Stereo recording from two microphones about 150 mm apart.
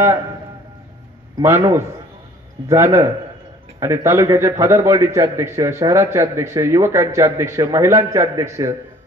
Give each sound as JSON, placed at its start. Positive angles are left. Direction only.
{"t": 1.4, "sound": "a man's voice", "side_deg": -15}